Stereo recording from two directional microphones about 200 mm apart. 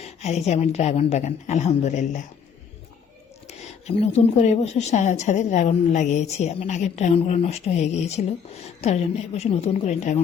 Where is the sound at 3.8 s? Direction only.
30° left (ahead or behind).